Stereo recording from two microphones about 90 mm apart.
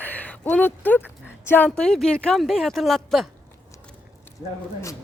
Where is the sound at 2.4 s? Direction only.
Centre (ahead or behind).